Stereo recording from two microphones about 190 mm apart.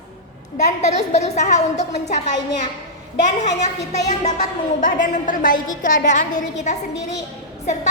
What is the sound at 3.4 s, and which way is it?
A woman's voice, 35° left (ahead or behind).